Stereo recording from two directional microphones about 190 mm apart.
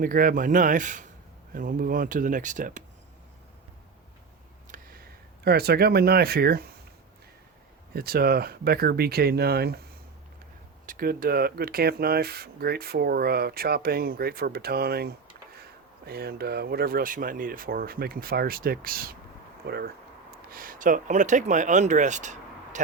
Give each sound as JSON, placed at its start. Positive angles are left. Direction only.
{"t": 0.0, "sound": "speech", "side_deg": -45}
{"t": 4.7, "sound": "a sound", "side_deg": -50}
{"t": 5.5, "sound": "speech", "side_deg": -55}
{"t": 7.9, "sound": "speech", "side_deg": -55}
{"t": 10.8, "sound": "speech", "side_deg": -50}